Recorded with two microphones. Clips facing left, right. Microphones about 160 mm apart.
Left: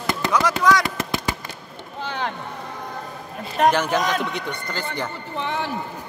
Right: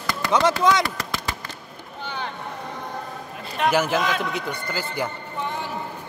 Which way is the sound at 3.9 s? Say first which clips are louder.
Left 1 dB; 40° left (ahead or behind).